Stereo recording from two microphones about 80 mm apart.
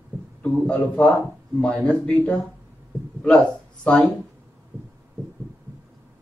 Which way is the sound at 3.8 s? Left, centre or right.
Centre.